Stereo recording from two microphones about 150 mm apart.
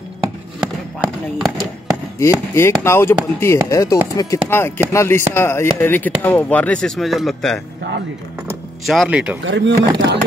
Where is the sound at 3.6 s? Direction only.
20° left (ahead or behind).